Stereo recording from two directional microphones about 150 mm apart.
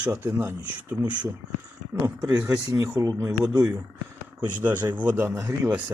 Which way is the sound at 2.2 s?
5° right (ahead or behind).